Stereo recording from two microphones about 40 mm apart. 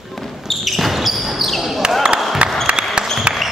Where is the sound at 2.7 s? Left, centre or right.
Right.